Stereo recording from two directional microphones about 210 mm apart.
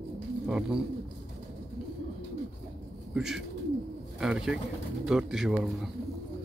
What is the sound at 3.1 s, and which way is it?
Speech, centre (ahead or behind).